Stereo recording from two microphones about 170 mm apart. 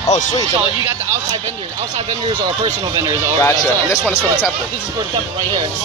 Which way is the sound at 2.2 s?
25° right (ahead or behind).